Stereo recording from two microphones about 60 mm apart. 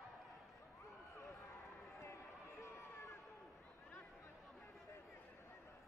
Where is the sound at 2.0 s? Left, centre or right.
Left.